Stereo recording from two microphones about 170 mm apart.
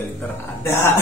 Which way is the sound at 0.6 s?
15° left (ahead or behind).